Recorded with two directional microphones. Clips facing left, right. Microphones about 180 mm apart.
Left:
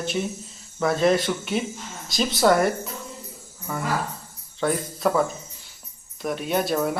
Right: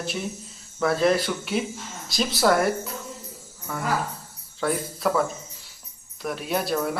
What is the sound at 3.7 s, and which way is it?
Speech, 5° left (ahead or behind).